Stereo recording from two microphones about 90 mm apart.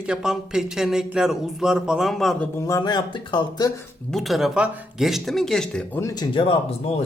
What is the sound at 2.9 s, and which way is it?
Speech, 65° left (ahead or behind).